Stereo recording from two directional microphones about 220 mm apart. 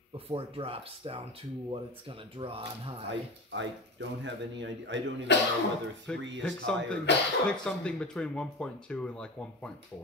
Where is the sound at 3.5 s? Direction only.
55° right (ahead or behind).